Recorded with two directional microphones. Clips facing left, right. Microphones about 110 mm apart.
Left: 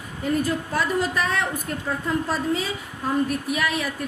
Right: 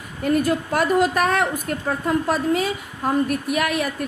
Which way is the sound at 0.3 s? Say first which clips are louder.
Right 4 dB; 65° right (ahead or behind).